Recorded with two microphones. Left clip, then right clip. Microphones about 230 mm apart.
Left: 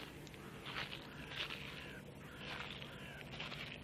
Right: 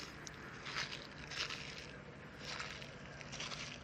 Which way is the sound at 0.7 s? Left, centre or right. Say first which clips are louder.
Right 2 dB; right.